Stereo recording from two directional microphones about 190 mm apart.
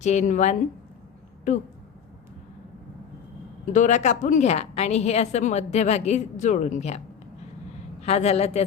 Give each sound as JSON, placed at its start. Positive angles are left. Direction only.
{"t": 0.0, "sound": "a woman's voice", "side_deg": 40}
{"t": 3.7, "sound": "a woman's voice", "side_deg": 40}
{"t": 8.0, "sound": "a woman's voice", "side_deg": 35}